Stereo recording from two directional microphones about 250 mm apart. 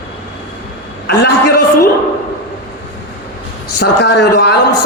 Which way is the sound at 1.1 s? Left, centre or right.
Left.